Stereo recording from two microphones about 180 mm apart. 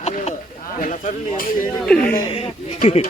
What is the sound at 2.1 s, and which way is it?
Speech, 25° left (ahead or behind).